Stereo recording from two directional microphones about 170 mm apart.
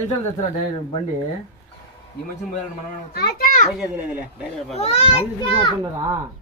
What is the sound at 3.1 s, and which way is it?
Children playing, 65° left (ahead or behind).